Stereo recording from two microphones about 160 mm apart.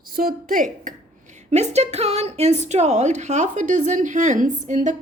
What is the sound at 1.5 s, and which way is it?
A woman's voice, 45° right (ahead or behind).